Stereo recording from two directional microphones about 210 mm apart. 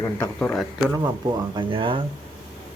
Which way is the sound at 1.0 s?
20° right (ahead or behind).